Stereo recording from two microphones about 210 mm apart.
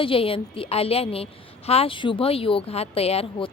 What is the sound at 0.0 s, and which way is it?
A woman's voice, 25° left (ahead or behind).